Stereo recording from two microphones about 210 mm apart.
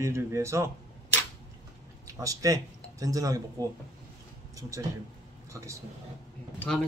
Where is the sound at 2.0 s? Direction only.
15° right (ahead or behind).